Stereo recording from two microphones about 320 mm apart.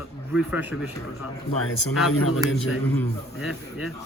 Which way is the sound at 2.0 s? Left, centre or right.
Left.